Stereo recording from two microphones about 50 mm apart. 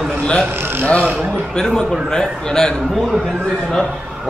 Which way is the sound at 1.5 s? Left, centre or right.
Centre.